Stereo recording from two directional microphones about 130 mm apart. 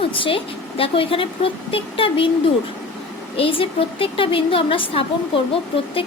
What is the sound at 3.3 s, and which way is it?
A woman's voice, 45° left (ahead or behind).